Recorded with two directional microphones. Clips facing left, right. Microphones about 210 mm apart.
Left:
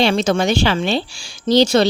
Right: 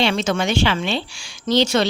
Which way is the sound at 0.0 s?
35° left (ahead or behind).